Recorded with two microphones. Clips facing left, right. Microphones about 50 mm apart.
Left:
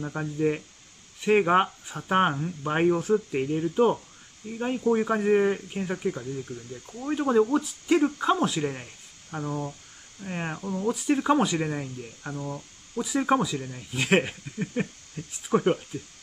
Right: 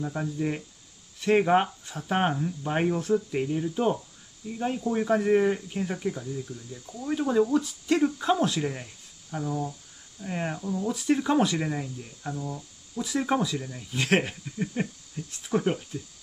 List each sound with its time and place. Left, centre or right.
0.0 s speech: centre
6.2 s speech: left
7.2 s speech: left
8.2 s speech: centre
8.6 s speech: left
10.2 s speech: left
10.6 s speech: left
11.0 s speech: centre
11.8 s cricket: left
13.0 s speech: centre
13.6 s speech: left
13.9 s speech: centre
14.8 s speech: left
15.2 s speech: left